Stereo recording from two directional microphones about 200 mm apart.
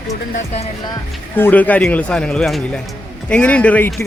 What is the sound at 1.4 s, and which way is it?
A man's voice, 10° left (ahead or behind).